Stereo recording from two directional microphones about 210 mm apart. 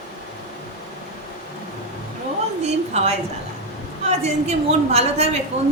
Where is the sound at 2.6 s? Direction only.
30° right (ahead or behind).